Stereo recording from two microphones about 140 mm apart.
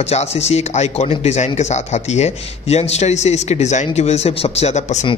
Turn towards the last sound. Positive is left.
turn(degrees=55)  # may be behind; listen again after turning